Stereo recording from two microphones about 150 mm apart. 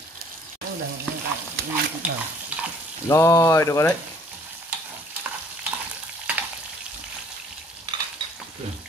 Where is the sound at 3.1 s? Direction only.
20° left (ahead or behind).